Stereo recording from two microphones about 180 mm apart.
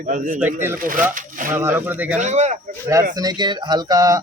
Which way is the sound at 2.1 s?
40° right (ahead or behind).